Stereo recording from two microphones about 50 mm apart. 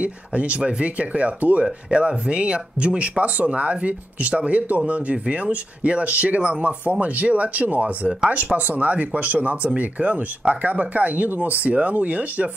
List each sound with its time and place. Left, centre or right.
0.0 s speech: right